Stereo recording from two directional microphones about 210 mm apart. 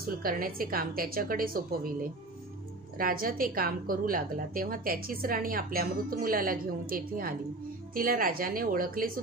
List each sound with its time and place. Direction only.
0.0 s a woman's voice: 45° right (ahead or behind)
3.0 s a woman's voice: 45° right (ahead or behind)